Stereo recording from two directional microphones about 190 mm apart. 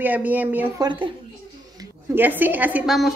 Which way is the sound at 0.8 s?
25° right (ahead or behind).